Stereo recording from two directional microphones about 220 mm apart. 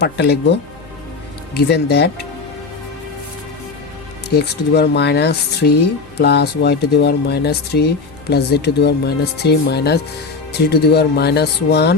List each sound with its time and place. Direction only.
0.0 s speech: 50° left (ahead or behind)
4.4 s speech: 50° left (ahead or behind)